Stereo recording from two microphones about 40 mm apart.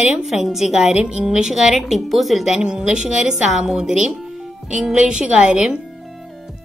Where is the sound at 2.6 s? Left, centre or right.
Right.